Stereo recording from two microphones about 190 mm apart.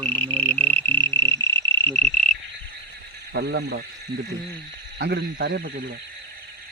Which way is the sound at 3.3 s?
60° right (ahead or behind).